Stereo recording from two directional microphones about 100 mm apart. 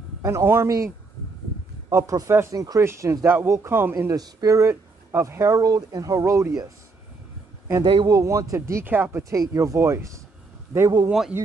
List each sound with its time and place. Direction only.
0.2 s speech: 30° right (ahead or behind)
4.1 s speech: 35° right (ahead or behind)
7.8 s speech: 55° right (ahead or behind)
8.1 s speech: 30° right (ahead or behind)
9.3 s speech: 35° right (ahead or behind)
11.1 s speech: 10° right (ahead or behind)